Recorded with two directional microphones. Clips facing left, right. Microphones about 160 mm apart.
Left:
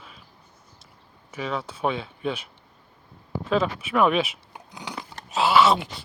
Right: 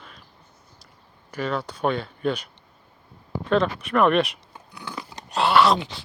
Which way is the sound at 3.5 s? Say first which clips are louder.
Right 2 dB; 5° left (ahead or behind).